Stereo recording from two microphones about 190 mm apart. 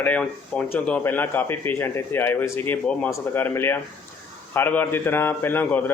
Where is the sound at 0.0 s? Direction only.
5° left (ahead or behind).